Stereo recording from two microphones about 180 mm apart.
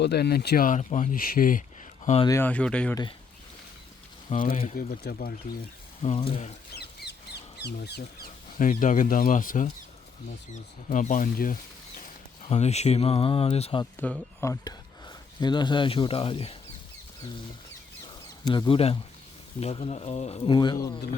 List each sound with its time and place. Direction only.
0.0 s speech: 65° left (ahead or behind)
2.2 s speech: 15° left (ahead or behind)
2.9 s speech: 25° left (ahead or behind)
4.3 s speech: 50° left (ahead or behind)
6.0 s speech: 35° left (ahead or behind)
6.7 s a sound: 65° left (ahead or behind)
8.5 s speech: 45° left (ahead or behind)
12.5 s speech: 35° left (ahead or behind)
14.0 s speech: 10° left (ahead or behind); by 16.6 s 30° left (ahead or behind)
18.4 s speech: 25° left (ahead or behind)
20.6 s speech: 25° left (ahead or behind)